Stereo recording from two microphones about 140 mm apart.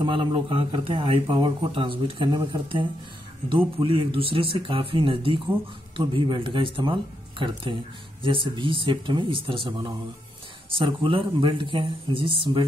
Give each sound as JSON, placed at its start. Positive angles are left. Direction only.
{"t": 0.0, "sound": "speech", "side_deg": -35}